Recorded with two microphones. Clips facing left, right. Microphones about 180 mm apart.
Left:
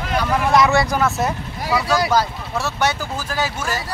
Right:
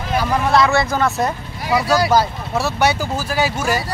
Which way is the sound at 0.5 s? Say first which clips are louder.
Even; 15° left (ahead or behind).